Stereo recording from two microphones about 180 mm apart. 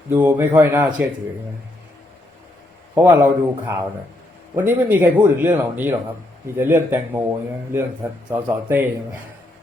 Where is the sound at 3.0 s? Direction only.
10° right (ahead or behind).